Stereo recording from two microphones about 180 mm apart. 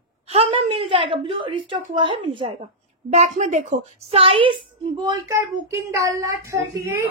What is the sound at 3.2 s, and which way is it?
A woman's voice, 40° right (ahead or behind).